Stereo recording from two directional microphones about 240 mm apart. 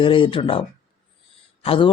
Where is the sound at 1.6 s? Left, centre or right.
Left.